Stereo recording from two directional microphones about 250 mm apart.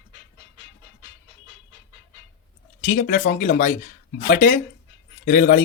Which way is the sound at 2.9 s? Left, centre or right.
Left.